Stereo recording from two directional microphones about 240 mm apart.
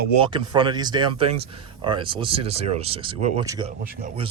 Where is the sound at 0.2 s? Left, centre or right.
Centre.